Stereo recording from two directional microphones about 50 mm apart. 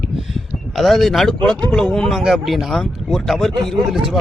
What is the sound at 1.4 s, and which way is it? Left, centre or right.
Speech, left.